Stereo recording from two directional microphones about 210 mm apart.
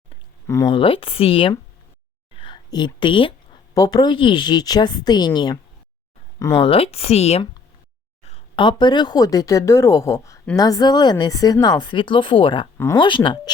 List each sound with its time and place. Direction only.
0.4 s a woman's voice: 15° left (ahead or behind)